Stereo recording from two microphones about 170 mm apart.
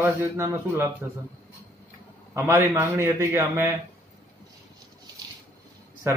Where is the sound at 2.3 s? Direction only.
15° right (ahead or behind).